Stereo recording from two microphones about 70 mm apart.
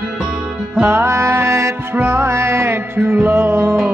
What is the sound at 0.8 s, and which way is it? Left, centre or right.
Music, right.